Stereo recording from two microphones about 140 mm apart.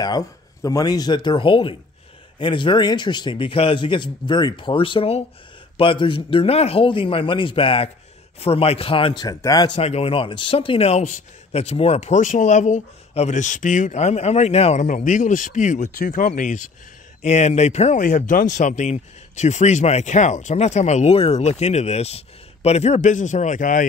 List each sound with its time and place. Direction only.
0.0 s a man's voice: 25° left (ahead or behind)
9.2 s speech: 25° left (ahead or behind)
9.8 s speech: 45° left (ahead or behind); by 16.7 s 65° left (ahead or behind)
17.2 s speech: 50° left (ahead or behind)